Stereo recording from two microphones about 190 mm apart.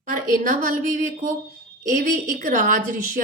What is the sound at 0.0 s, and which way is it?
A woman's voice, 45° right (ahead or behind).